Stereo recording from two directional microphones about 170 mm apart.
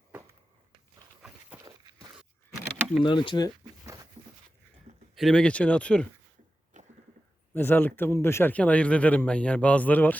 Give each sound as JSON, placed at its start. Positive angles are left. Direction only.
{"t": 3.0, "sound": "speech", "side_deg": 30}
{"t": 5.1, "sound": "speech", "side_deg": 0}
{"t": 6.8, "sound": "a sound", "side_deg": -45}
{"t": 7.5, "sound": "speech", "side_deg": 10}